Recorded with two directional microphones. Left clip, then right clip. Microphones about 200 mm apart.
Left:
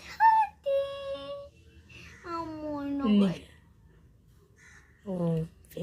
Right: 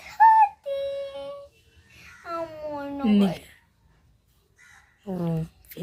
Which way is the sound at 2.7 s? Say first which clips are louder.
Right 3 dB; 30° right (ahead or behind).